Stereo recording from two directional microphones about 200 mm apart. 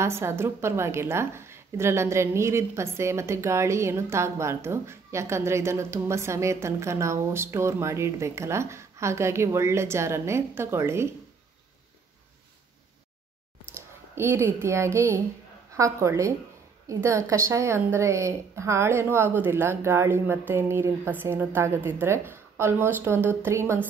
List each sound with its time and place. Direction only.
0.0 s a woman's voice: 15° right (ahead or behind)
13.7 s a woman's voice: 10° right (ahead or behind)